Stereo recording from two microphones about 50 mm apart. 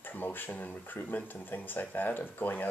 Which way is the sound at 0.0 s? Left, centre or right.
Left.